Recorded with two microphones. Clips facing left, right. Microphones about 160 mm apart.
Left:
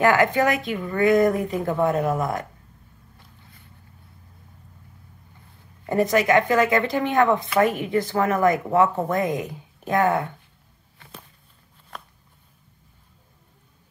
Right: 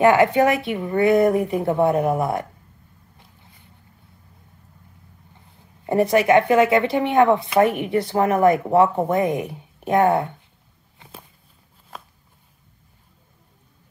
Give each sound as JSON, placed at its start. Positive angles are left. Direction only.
{"t": 0.0, "sound": "speech", "side_deg": -25}
{"t": 5.9, "sound": "speech", "side_deg": -25}